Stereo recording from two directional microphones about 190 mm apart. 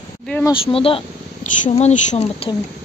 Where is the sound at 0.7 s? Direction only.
30° left (ahead or behind).